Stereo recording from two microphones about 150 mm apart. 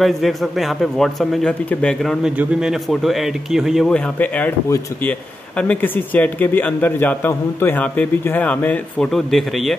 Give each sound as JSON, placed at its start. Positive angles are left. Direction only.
{"t": 0.0, "sound": "speech", "side_deg": 0}
{"t": 2.2, "sound": "speech", "side_deg": -5}
{"t": 4.6, "sound": "speech", "side_deg": 20}
{"t": 5.6, "sound": "a man's voice", "side_deg": 10}